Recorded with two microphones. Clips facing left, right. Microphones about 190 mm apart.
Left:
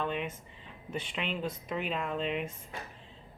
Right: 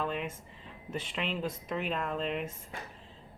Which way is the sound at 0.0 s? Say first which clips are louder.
Even; centre (ahead or behind).